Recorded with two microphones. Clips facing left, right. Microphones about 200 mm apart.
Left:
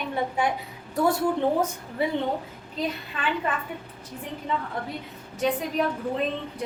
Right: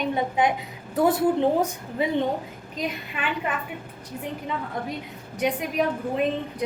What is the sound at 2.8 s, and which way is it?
Speech, 15° right (ahead or behind).